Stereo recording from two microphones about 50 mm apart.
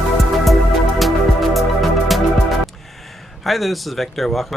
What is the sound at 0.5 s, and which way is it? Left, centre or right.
Music, centre.